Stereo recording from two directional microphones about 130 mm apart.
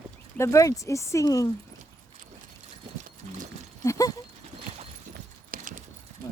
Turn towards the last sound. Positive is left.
turn(degrees=-90)